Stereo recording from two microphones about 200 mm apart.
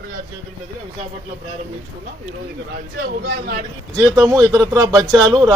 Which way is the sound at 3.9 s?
Centre (ahead or behind).